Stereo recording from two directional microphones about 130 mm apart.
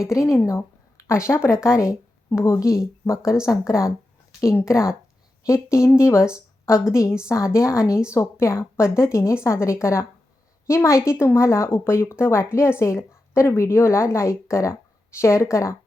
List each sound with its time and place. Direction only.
0.0 s a woman's voice: 25° left (ahead or behind)